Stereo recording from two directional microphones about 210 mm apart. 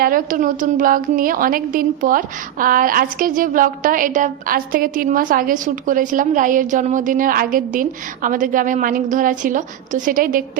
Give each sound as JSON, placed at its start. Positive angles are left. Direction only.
{"t": 0.0, "sound": "a woman's voice", "side_deg": -40}